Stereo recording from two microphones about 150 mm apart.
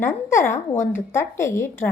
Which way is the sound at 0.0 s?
15° left (ahead or behind).